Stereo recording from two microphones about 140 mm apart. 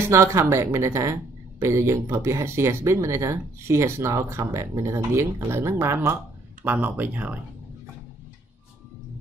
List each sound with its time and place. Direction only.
0.0 s speech: 20° right (ahead or behind)